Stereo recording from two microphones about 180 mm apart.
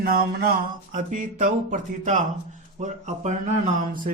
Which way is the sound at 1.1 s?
45° right (ahead or behind).